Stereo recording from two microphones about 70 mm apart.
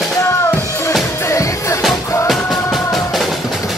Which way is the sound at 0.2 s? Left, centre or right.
Left.